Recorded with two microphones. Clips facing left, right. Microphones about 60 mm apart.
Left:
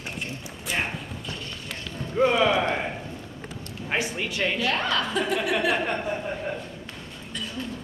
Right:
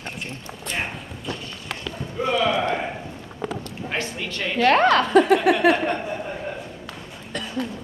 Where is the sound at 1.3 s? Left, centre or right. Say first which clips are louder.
Right 7 dB; right.